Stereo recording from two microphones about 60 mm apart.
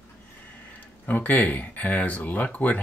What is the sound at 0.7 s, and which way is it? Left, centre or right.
Speech, left.